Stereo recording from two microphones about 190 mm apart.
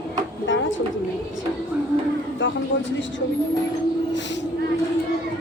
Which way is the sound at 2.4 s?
75° left (ahead or behind).